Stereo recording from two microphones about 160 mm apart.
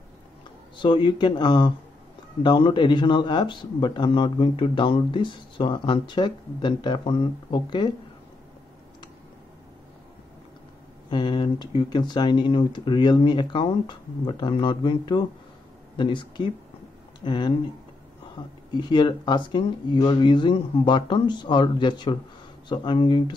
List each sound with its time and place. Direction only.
0.7 s a man's voice: 30° left (ahead or behind)
11.1 s a man's voice: 30° left (ahead or behind)
18.7 s a man's voice: 30° left (ahead or behind)